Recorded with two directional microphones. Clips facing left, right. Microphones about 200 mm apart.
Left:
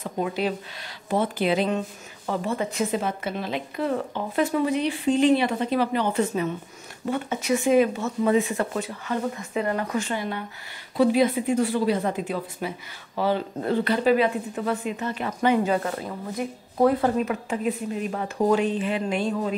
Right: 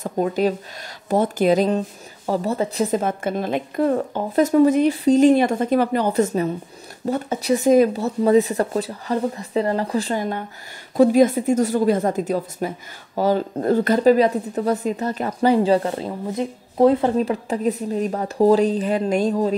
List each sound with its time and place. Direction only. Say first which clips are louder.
0.0 s a woman's voice: right 6 dB; 45° right (ahead or behind)